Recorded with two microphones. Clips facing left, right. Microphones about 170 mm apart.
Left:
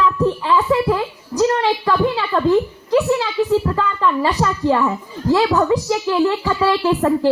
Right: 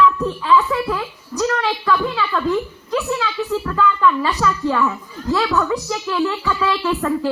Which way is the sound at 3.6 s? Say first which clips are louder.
Right 1 dB; 30° left (ahead or behind).